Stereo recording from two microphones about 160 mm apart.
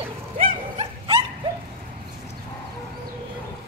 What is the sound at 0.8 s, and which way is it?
Dog, 30° right (ahead or behind).